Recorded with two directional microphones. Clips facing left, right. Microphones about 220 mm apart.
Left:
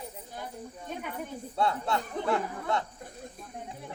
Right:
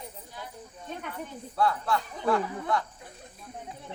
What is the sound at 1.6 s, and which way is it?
Speech, 25° left (ahead or behind).